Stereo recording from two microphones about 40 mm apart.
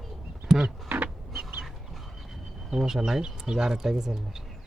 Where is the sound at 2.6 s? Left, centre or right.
Centre.